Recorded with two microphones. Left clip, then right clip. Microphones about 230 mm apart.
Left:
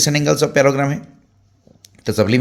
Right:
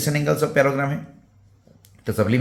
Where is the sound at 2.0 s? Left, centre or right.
Left.